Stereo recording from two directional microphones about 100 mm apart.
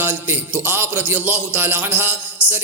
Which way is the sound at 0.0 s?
20° right (ahead or behind).